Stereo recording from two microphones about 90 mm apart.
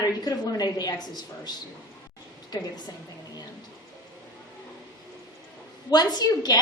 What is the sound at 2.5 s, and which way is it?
Speech, 50° left (ahead or behind).